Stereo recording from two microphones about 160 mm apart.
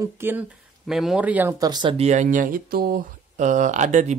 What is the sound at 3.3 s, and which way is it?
Speech, 50° right (ahead or behind).